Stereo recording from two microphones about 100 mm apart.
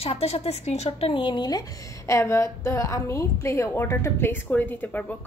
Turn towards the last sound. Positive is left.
turn(degrees=15)  # may be behind; listen again after turning